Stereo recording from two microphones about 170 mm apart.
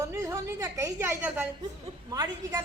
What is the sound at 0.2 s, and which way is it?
A woman's voice, 20° right (ahead or behind).